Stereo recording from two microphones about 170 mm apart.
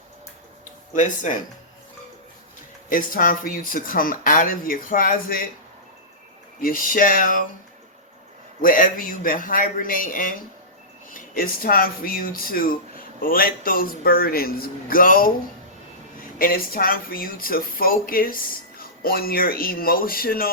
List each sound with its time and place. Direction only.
0.9 s a man's voice: 50° left (ahead or behind)
2.9 s speech: 55° left (ahead or behind)
6.6 s speech: 55° left (ahead or behind)
8.6 s a man's voice: 55° left (ahead or behind)
16.4 s speech: 60° left (ahead or behind)